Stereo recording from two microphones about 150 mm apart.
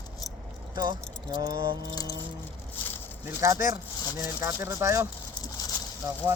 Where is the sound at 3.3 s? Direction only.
20° right (ahead or behind).